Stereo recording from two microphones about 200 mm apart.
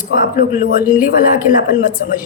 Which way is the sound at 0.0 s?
45° left (ahead or behind).